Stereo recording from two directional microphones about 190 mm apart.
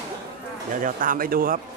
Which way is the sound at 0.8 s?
45° right (ahead or behind).